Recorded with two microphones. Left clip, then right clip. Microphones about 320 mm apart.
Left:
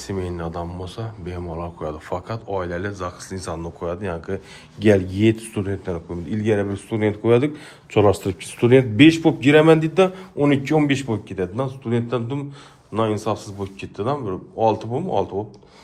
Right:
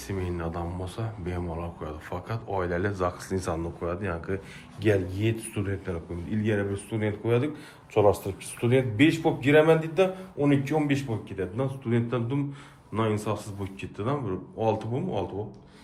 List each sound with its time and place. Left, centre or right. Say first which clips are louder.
0.1 s speech: left 5 dB; centre
4.8 s speech: left 9 dB; centre